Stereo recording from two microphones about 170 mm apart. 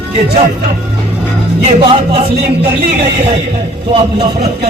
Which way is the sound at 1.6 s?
35° right (ahead or behind).